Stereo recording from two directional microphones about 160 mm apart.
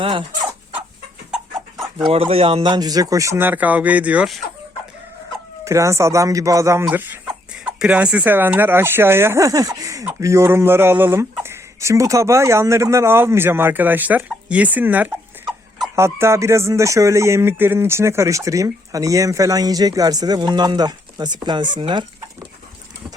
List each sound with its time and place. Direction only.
0.0 s speech: 30° right (ahead or behind)
1.3 s dog: 5° right (ahead or behind)
2.0 s speech: 35° right (ahead or behind); by 4.4 s 10° right (ahead or behind)
5.6 s speech: 20° right (ahead or behind)